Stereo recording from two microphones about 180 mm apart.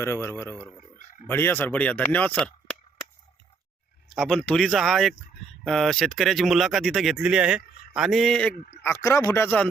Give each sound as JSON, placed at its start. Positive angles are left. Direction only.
{"t": 0.0, "sound": "speech", "side_deg": 15}
{"t": 4.1, "sound": "speech", "side_deg": 0}
{"t": 8.5, "sound": "speech", "side_deg": 55}
{"t": 8.8, "sound": "speech", "side_deg": 15}